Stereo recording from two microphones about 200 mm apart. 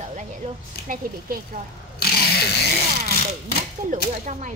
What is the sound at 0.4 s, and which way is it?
Speech, 30° right (ahead or behind).